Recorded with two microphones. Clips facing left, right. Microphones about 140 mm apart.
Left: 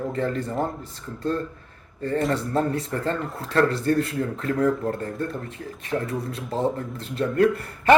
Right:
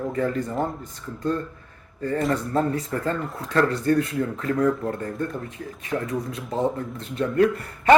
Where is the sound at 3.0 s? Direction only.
5° right (ahead or behind).